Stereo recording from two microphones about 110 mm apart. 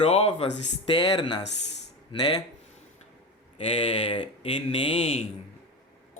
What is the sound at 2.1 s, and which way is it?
Speech, 55° left (ahead or behind).